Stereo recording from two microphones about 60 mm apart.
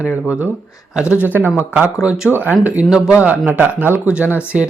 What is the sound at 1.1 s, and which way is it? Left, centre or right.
Speech, left.